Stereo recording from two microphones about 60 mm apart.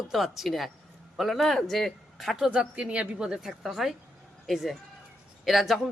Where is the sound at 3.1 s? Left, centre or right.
Centre.